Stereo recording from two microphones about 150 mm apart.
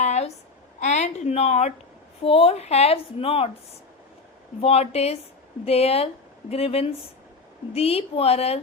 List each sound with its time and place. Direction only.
0.0 s a sound: 45° left (ahead or behind)
0.8 s a woman's voice: 50° left (ahead or behind)
4.6 s a woman's voice: 40° left (ahead or behind)